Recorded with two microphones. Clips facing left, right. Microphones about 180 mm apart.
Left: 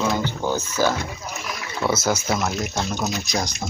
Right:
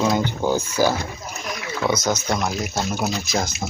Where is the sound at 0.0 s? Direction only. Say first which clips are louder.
Right 3 dB; 15° right (ahead or behind).